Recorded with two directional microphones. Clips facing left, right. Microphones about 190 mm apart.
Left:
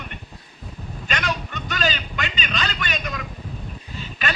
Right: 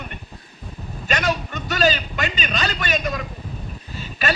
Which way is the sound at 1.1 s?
45° right (ahead or behind).